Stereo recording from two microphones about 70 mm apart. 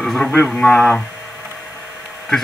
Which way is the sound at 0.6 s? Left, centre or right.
Centre.